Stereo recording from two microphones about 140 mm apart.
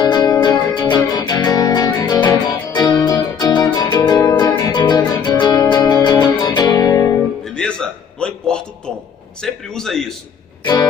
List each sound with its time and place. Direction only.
0.0 s music: 30° left (ahead or behind)
7.6 s music: 5° left (ahead or behind)
8.2 s a sound: 5° left (ahead or behind)
10.6 s music: 30° left (ahead or behind)